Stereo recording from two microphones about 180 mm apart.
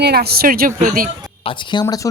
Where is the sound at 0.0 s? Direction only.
60° right (ahead or behind).